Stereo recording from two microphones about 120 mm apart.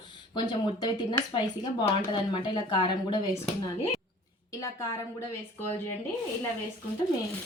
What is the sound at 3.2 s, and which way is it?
Speech, 30° left (ahead or behind).